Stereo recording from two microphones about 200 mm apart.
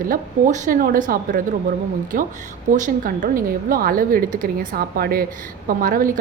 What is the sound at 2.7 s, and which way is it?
A woman's voice, 45° right (ahead or behind).